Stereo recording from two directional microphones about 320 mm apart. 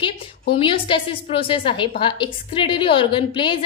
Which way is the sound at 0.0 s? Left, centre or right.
Centre.